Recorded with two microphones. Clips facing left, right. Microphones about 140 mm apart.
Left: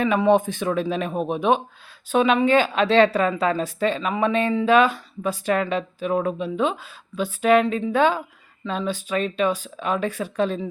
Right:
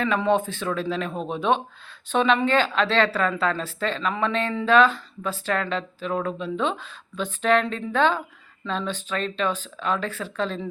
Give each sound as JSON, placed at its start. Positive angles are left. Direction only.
{"t": 0.0, "sound": "speech", "side_deg": 15}